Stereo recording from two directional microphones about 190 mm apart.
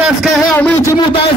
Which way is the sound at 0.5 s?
10° left (ahead or behind).